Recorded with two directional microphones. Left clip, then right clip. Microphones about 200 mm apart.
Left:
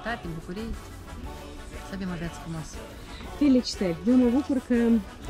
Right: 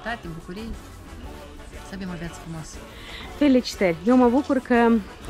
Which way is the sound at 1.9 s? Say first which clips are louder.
Right 1 dB; centre (ahead or behind).